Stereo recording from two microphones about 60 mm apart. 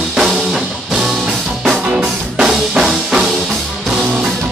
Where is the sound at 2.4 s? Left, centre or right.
Centre.